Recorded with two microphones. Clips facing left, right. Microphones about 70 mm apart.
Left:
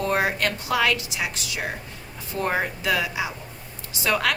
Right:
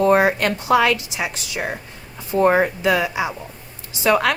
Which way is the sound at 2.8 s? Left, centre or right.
Right.